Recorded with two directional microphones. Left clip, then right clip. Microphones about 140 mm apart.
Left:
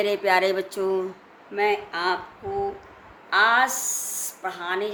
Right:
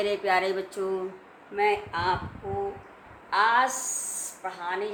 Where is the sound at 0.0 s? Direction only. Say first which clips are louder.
Left 4 dB; 40° left (ahead or behind).